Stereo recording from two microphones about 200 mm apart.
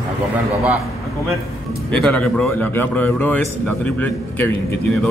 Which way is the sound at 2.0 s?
5° left (ahead or behind).